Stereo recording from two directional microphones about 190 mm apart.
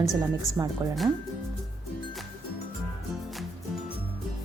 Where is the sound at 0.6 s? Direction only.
10° right (ahead or behind).